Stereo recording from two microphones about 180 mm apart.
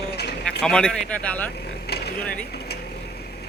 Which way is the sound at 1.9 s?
65° left (ahead or behind).